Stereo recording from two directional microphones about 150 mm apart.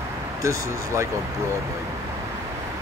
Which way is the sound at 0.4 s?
20° right (ahead or behind).